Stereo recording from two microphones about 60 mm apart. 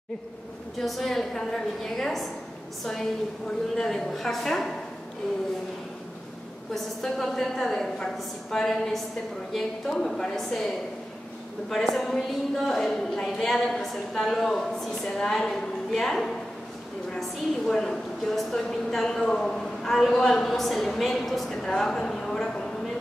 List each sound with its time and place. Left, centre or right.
0.7 s a woman's voice: centre
6.7 s a woman's voice: centre
11.7 s a woman's voice: centre